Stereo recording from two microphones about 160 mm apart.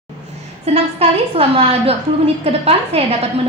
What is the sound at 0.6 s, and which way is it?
A woman's voice, 40° right (ahead or behind).